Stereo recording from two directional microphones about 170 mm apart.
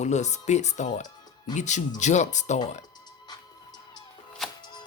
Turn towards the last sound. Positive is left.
turn(degrees=0)  # may be behind; listen again after turning